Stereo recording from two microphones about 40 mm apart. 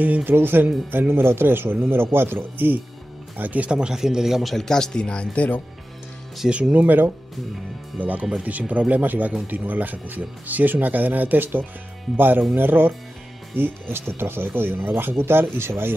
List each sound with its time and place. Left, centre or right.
0.2 s a man's voice: right
3.3 s speech: right
3.7 s speech: right
4.0 s a man's voice: centre
4.4 s speech: centre
4.6 s speech: centre
6.7 s speech: right
9.0 s speech: right
14.1 s speech: right